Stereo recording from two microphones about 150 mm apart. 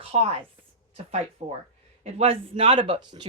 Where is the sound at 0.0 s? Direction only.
40° right (ahead or behind).